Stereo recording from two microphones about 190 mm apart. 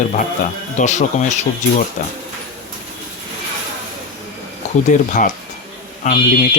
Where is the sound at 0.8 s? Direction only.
40° left (ahead or behind).